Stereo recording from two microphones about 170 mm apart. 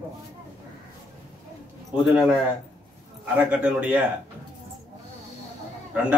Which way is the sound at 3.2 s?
5° right (ahead or behind).